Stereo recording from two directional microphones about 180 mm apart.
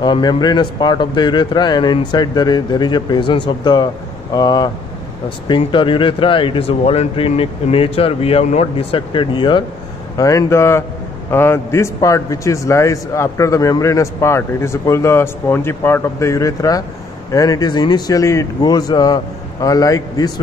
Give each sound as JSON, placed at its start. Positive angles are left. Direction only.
{"t": 0.0, "sound": "a man's voice", "side_deg": 25}